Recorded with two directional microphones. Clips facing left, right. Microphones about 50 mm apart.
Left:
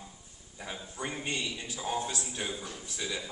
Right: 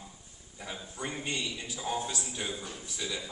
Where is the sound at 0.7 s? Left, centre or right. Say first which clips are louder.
Even; centre.